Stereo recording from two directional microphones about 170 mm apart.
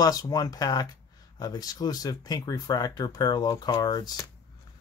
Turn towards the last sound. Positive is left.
turn(degrees=25)  # may be behind; listen again after turning